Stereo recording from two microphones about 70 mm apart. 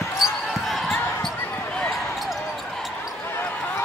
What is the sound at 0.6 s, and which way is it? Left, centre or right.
Basketball bounce, centre.